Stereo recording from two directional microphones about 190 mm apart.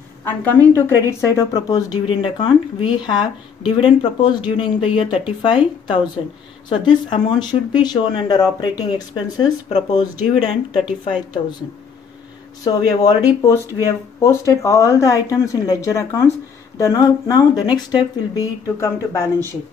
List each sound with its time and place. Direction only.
0.6 s speech: 15° left (ahead or behind)
6.7 s speech: 25° left (ahead or behind)
10.1 s speech: 5° right (ahead or behind)
12.6 s speech: 20° left (ahead or behind)